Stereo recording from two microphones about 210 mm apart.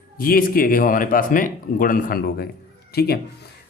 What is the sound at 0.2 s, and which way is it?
A man's voice, 45° left (ahead or behind).